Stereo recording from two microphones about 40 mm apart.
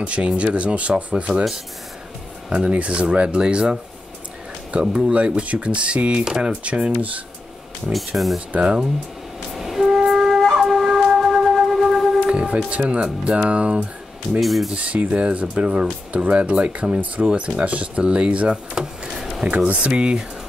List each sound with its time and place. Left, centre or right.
0.0 s speech: right
2.5 s speech: right
4.7 s speech: right
6.2 s speech: centre
6.6 s speech: right
8.5 s speech: right
9.5 s wind instrument: centre
12.3 s speech: right
14.4 s speech: centre
14.7 s speech: right
19.5 s speech: right
19.8 s speech: right